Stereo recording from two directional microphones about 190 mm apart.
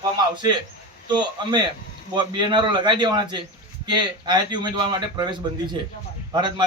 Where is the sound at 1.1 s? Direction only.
25° right (ahead or behind).